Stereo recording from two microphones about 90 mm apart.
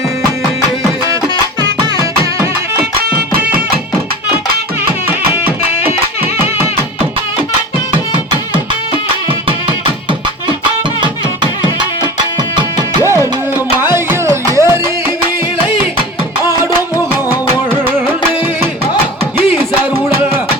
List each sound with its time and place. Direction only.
13.7 s music: 25° right (ahead or behind)